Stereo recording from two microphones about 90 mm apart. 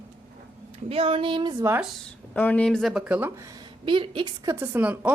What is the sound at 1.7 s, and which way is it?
Speech, 30° right (ahead or behind).